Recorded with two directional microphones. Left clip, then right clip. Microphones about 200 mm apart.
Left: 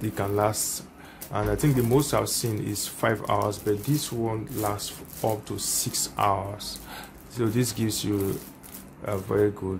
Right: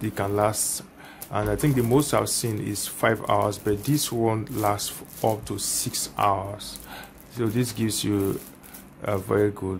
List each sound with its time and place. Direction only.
0.0 s speech: 10° right (ahead or behind)